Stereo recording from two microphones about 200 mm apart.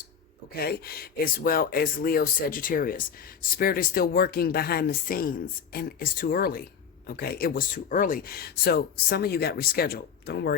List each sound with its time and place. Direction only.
0.5 s speech: 50° left (ahead or behind)